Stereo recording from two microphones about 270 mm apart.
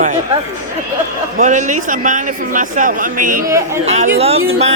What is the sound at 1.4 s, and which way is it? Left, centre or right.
Speech, right.